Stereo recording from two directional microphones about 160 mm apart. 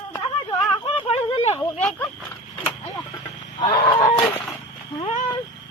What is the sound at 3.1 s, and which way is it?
Chicken, 25° left (ahead or behind).